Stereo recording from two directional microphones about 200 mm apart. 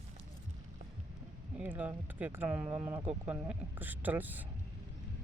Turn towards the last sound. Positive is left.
turn(degrees=-10)  # may be behind; listen again after turning